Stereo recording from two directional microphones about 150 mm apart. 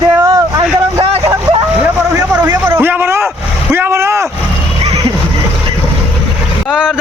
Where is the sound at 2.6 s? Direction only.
15° right (ahead or behind).